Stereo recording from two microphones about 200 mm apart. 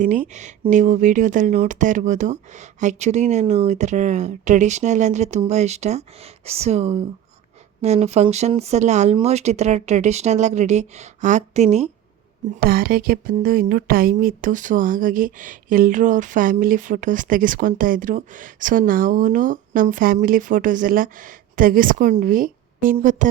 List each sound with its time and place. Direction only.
0.0 s speech: 40° right (ahead or behind)
12.5 s speech: 45° right (ahead or behind)